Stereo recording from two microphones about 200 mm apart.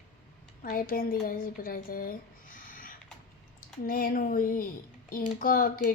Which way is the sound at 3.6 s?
45° left (ahead or behind).